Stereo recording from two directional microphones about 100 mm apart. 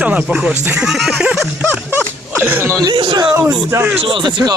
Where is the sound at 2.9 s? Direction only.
50° right (ahead or behind).